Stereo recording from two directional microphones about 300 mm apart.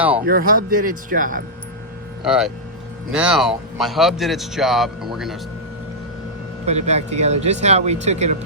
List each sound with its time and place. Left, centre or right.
0.3 s speech: right
2.2 s speech: centre
6.7 s speech: right